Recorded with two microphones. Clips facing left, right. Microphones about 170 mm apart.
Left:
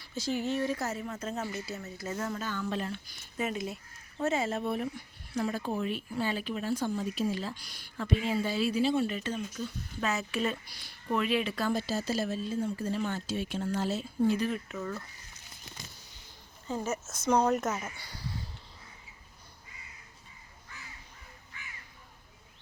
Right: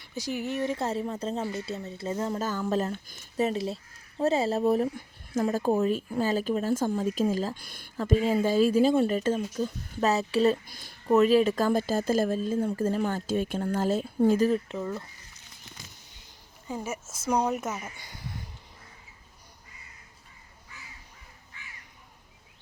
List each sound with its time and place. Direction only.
0.0 s speech: 15° right (ahead or behind)
2.4 s speech: 40° right (ahead or behind)
10.7 s speech: 45° right (ahead or behind); by 15.0 s 25° right (ahead or behind)
16.6 s speech: 10° right (ahead or behind)